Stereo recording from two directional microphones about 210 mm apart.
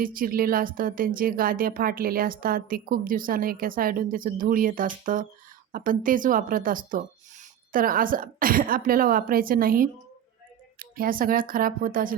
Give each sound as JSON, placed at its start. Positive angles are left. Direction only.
{"t": 0.0, "sound": "a woman's voice", "side_deg": -40}